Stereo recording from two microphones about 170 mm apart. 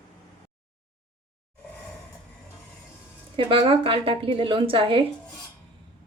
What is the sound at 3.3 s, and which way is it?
A woman's voice, 30° right (ahead or behind).